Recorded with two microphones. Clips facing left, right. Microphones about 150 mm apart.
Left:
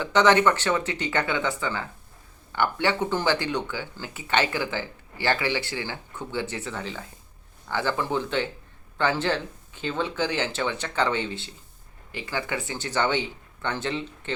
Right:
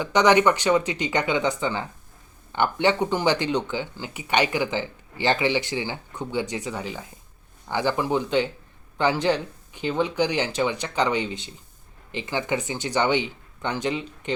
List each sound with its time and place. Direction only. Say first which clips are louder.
0.0 s speech: right 1 dB; 15° right (ahead or behind)